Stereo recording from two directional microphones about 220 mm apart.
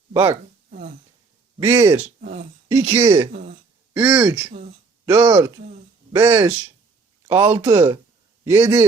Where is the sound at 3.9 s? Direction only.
10° right (ahead or behind).